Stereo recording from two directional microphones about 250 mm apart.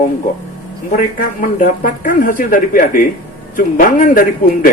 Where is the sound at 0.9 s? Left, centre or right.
Left.